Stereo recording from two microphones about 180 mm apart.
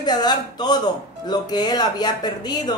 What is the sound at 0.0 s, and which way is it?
Speech, 25° left (ahead or behind).